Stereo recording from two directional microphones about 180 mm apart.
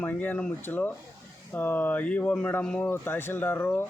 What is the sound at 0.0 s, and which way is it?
Speech, 10° left (ahead or behind).